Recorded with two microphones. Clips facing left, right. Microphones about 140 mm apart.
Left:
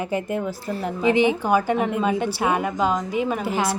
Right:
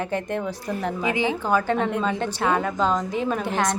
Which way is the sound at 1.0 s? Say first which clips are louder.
Left 8 dB; 25° left (ahead or behind).